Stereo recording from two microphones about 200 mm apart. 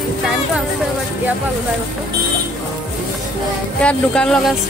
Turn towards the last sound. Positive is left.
turn(degrees=5)  # may be behind; listen again after turning